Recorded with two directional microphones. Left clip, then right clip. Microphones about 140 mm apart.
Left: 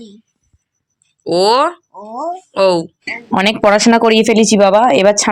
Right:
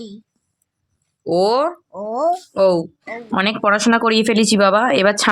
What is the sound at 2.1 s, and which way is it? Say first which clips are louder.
Speech: right 4 dB; 75° right (ahead or behind).